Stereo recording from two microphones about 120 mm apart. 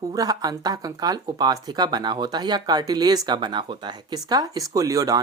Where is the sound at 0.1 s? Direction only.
30° right (ahead or behind).